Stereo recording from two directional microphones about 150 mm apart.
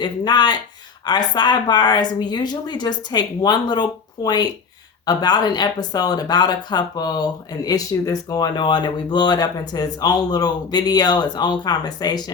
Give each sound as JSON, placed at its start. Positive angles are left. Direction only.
{"t": 0.0, "sound": "speech", "side_deg": 30}